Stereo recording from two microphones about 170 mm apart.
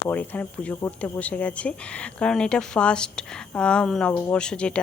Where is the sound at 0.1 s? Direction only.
10° left (ahead or behind).